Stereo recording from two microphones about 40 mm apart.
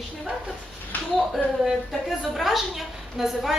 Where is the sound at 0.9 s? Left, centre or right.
Left.